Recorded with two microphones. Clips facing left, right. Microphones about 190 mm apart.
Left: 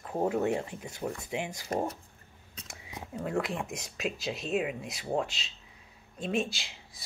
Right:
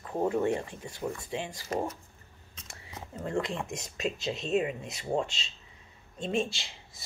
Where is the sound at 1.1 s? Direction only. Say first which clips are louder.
Left 1 dB; 15° left (ahead or behind).